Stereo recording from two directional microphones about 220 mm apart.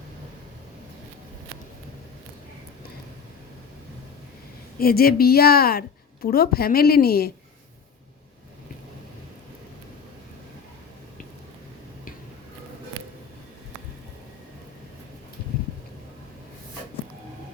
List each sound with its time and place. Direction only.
4.8 s a woman's voice: 45° left (ahead or behind)